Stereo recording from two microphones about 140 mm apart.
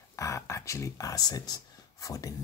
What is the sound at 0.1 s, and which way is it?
Speech, 20° left (ahead or behind).